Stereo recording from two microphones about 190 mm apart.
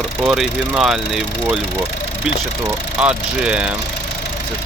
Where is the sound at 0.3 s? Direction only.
5° right (ahead or behind).